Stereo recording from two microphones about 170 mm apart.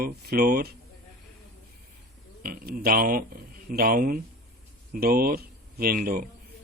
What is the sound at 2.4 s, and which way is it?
Speech, 60° right (ahead or behind).